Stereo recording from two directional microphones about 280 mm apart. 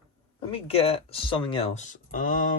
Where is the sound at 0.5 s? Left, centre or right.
Left.